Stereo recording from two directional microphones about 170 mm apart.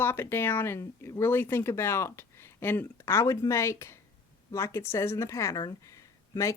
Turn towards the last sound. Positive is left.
turn(degrees=20)  # may be behind; listen again after turning